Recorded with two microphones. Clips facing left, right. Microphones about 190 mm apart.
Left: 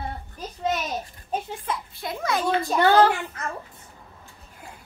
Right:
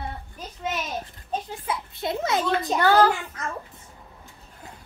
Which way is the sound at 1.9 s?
25° right (ahead or behind).